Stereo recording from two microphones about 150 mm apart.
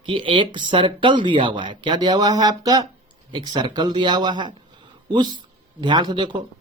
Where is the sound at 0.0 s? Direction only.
35° right (ahead or behind).